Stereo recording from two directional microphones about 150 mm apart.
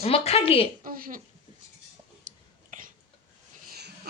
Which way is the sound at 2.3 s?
55° right (ahead or behind).